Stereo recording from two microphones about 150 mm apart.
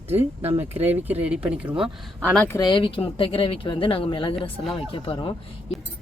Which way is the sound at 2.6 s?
35° left (ahead or behind).